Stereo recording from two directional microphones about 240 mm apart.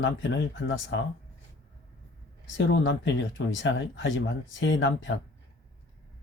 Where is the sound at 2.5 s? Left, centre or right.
Left.